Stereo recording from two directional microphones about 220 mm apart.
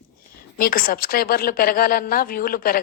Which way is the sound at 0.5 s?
40° left (ahead or behind).